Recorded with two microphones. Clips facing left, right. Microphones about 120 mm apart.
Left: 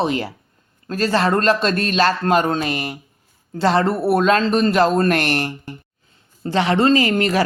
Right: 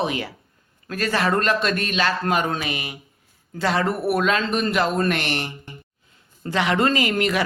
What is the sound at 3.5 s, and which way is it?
Speech, 35° left (ahead or behind).